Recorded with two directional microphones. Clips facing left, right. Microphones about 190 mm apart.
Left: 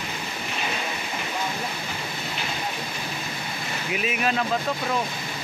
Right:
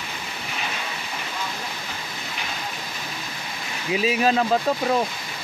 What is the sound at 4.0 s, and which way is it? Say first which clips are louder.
Speech: right 6 dB; 30° right (ahead or behind).